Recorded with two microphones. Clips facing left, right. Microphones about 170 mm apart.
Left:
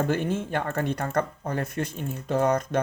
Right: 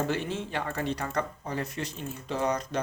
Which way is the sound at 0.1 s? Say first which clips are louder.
Left 5 dB; 50° left (ahead or behind).